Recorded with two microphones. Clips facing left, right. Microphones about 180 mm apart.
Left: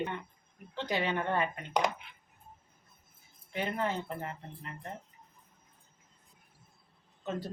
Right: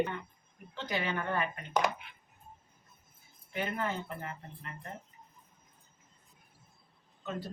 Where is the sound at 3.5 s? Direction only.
30° left (ahead or behind).